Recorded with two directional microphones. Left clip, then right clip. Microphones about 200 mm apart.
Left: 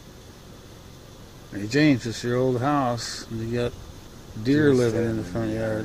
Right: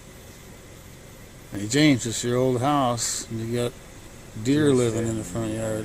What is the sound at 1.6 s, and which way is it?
Speech, 15° right (ahead or behind).